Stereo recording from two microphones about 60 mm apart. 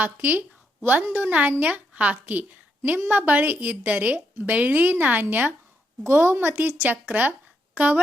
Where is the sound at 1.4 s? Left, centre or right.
Right.